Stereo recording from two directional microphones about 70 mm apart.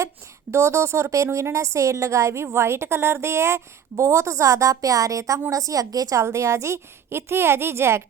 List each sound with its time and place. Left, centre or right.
0.5 s a woman's voice: right